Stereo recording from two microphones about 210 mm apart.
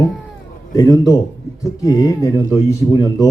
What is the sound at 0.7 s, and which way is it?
A man's voice, 15° left (ahead or behind).